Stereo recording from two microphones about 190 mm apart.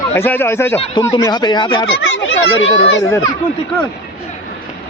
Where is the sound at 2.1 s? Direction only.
85° left.